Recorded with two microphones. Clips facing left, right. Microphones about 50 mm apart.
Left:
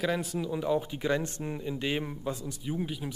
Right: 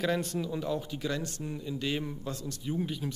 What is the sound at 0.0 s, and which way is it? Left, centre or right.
Speech, centre.